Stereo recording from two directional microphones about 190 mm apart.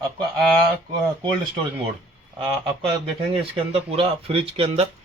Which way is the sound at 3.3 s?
30° right (ahead or behind).